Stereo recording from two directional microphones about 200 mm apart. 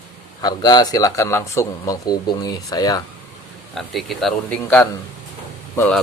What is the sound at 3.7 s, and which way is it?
A man's voice, centre (ahead or behind).